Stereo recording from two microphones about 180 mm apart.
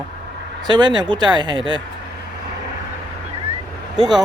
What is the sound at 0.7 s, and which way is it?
Speech, 25° right (ahead or behind).